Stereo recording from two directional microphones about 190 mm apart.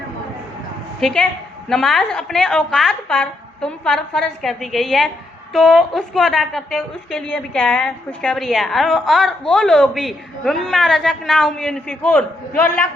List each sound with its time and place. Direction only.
0.9 s a woman's voice: 5° left (ahead or behind)